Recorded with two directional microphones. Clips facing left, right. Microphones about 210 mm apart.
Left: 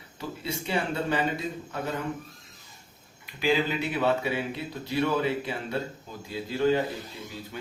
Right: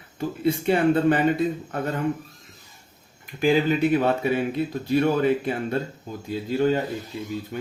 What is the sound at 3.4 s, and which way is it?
Speech, 50° right (ahead or behind).